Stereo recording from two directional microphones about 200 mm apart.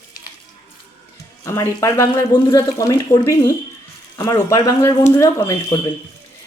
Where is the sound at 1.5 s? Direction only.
15° left (ahead or behind).